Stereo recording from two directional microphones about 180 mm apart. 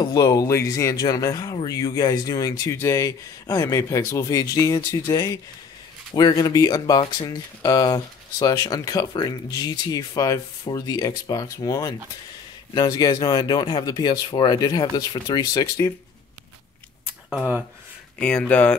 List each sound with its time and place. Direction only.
0.0 s speech: 20° left (ahead or behind)
18.2 s speech: 5° left (ahead or behind)